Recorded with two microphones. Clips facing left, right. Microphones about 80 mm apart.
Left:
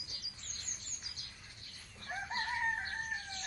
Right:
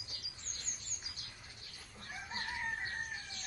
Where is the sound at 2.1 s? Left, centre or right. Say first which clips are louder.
Left 5 dB; left.